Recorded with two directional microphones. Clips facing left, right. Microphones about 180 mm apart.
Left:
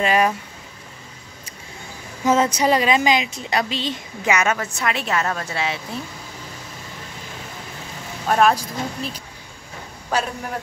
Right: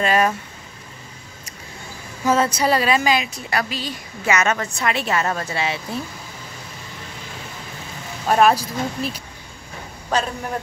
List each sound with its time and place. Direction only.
0.0 s speech: 15° left (ahead or behind)
2.2 s a woman's voice: 20° left (ahead or behind)
4.3 s a woman's voice: 10° left (ahead or behind)
8.3 s a woman's voice: 5° right (ahead or behind)
10.1 s speech: 10° left (ahead or behind)